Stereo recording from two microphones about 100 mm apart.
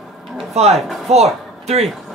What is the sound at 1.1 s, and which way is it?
Speech, 90° right.